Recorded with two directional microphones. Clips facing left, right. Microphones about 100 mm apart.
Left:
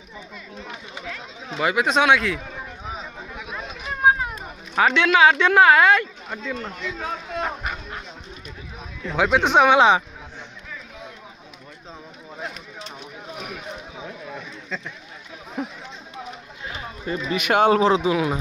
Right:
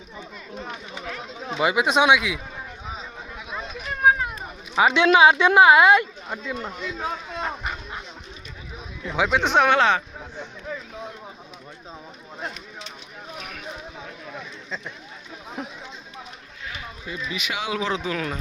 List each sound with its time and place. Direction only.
1.0 s speech: 25° right (ahead or behind)
2.9 s a sound: centre (ahead or behind)
4.7 s speech: 15° right (ahead or behind)
7.3 s speech: 5° left (ahead or behind)
9.0 s speech: centre (ahead or behind)
15.6 s chatter: centre (ahead or behind)
16.6 s a sound: 35° left (ahead or behind)
17.1 s speech: 55° left (ahead or behind)
17.9 s speech: 15° left (ahead or behind)